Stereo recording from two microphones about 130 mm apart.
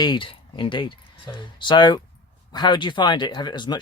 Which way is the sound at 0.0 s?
40° left (ahead or behind).